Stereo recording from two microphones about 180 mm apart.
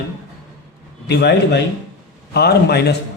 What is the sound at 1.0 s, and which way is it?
A man's voice, 65° left (ahead or behind).